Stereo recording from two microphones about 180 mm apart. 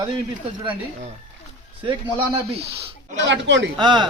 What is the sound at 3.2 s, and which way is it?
Speech, 90° right.